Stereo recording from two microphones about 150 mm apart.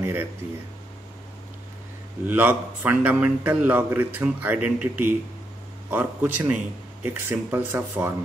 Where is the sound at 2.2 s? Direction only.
10° right (ahead or behind).